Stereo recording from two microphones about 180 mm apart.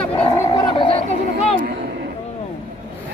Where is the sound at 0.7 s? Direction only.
30° left (ahead or behind).